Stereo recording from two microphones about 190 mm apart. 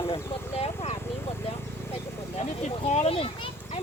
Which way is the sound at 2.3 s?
35° left (ahead or behind).